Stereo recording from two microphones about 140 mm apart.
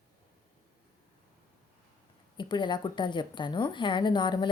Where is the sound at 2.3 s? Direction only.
30° left (ahead or behind).